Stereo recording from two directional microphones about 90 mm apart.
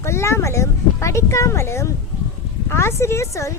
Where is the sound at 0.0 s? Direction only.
30° left (ahead or behind).